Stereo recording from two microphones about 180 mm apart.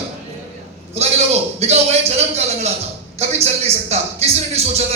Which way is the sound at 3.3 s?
35° right (ahead or behind).